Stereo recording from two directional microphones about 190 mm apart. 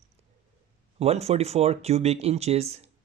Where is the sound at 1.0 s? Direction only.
35° right (ahead or behind).